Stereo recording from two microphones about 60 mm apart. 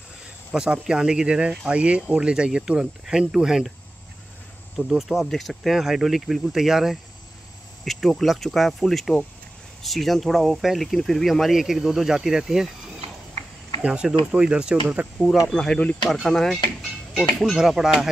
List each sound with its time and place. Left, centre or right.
0.5 s speech: centre
4.7 s speech: centre
13.8 s speech: centre
15.2 s speech: left
15.5 s speech: centre